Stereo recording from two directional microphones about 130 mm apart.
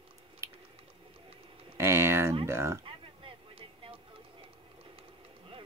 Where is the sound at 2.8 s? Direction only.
45° right (ahead or behind).